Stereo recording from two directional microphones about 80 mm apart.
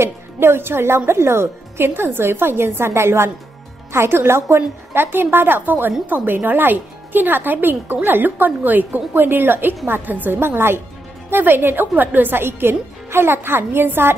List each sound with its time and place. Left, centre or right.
0.0 s a woman's voice: right